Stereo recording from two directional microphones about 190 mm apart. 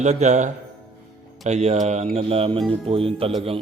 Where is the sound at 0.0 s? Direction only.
35° right (ahead or behind).